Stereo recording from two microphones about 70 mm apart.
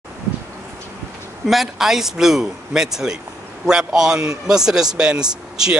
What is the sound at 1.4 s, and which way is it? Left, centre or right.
A man's voice, centre.